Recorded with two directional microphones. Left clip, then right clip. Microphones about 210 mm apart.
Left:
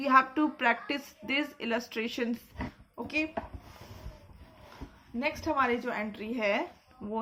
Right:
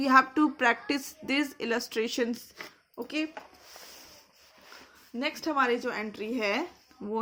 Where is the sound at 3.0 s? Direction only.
25° right (ahead or behind).